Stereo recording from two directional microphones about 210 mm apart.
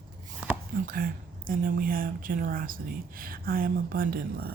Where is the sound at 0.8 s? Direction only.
40° right (ahead or behind).